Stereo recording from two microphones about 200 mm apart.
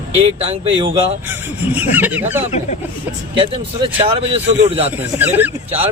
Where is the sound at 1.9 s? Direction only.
10° right (ahead or behind).